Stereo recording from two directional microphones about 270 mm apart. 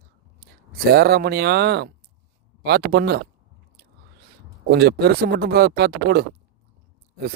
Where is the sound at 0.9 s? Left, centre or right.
Right.